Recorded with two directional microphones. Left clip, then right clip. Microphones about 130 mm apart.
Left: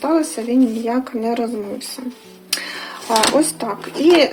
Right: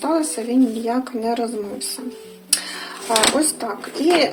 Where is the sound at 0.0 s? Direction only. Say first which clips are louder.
Left 2 dB; 15° left (ahead or behind).